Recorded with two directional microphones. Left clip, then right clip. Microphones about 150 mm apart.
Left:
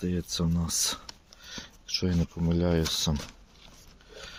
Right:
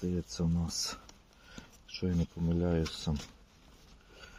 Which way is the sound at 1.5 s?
35° left (ahead or behind).